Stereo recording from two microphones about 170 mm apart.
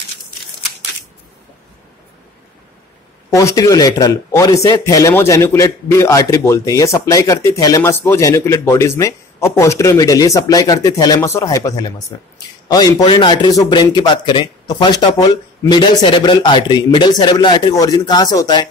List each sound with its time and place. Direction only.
3.3 s speech: 20° left (ahead or behind)